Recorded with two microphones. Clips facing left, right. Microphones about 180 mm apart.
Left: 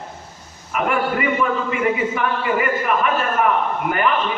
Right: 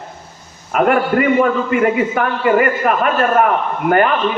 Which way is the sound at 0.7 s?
55° right (ahead or behind).